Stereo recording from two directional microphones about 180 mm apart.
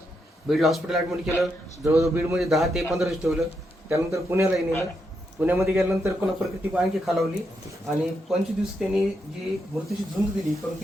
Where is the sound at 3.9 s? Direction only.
15° right (ahead or behind).